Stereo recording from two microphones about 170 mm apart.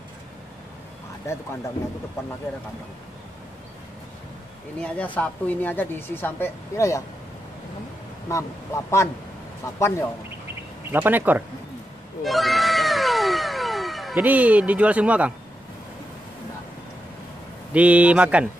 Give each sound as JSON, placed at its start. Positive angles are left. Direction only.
{"t": 1.3, "sound": "speech", "side_deg": 15}
{"t": 4.7, "sound": "speech", "side_deg": 5}
{"t": 8.3, "sound": "speech", "side_deg": 15}
{"t": 10.4, "sound": "bird", "side_deg": -10}
{"t": 12.2, "sound": "cat", "side_deg": 0}
{"t": 17.7, "sound": "speech", "side_deg": -10}